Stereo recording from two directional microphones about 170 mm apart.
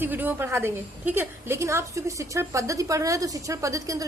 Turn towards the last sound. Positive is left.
turn(degrees=-20)  # may be behind; listen again after turning